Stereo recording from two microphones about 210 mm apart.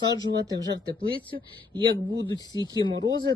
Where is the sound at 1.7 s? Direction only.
20° right (ahead or behind).